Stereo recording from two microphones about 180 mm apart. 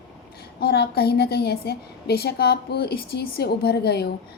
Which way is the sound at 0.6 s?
60° left (ahead or behind).